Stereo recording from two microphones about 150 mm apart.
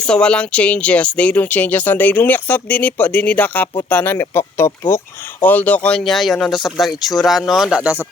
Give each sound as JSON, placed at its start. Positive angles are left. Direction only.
{"t": 0.0, "sound": "speech", "side_deg": 5}